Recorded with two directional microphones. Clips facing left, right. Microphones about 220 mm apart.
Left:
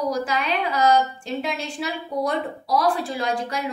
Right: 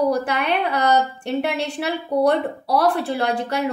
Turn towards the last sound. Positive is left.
turn(degrees=-65)  # may be behind; listen again after turning